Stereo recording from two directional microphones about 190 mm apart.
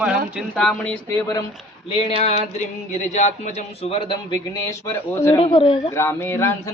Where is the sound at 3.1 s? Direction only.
40° left (ahead or behind).